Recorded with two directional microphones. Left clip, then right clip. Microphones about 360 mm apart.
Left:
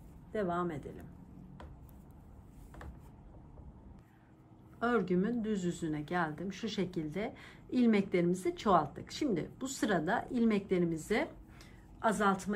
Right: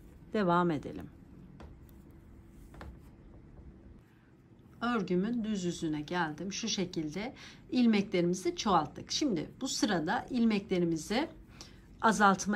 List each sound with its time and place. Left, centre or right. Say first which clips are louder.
0.3 s speech: right 6 dB; right
4.7 s speech: left 1 dB; centre